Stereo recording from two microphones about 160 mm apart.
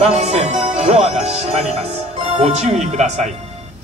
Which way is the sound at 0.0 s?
40° right (ahead or behind).